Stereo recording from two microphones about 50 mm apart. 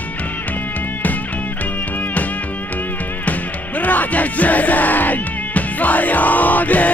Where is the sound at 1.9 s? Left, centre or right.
Left.